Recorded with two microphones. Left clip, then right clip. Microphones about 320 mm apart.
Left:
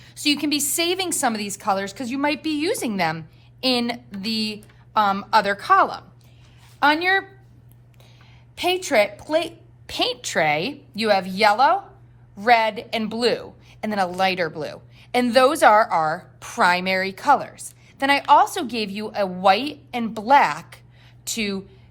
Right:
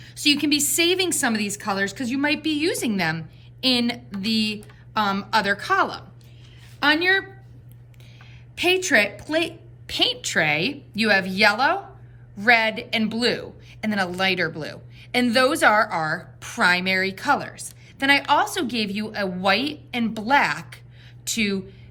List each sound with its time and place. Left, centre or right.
0.0 s a woman's voice: centre
8.5 s a woman's voice: centre